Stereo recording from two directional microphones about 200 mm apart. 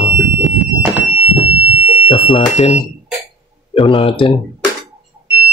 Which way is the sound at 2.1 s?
25° left (ahead or behind).